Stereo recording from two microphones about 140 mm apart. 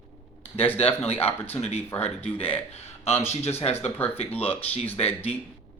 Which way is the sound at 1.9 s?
15° left (ahead or behind).